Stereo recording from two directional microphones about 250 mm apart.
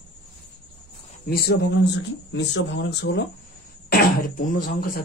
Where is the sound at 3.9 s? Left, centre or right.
Left.